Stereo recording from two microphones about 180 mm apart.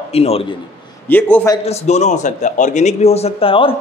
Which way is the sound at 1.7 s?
35° left (ahead or behind).